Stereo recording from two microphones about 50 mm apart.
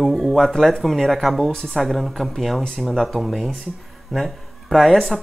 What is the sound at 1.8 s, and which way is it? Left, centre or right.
Speech, centre.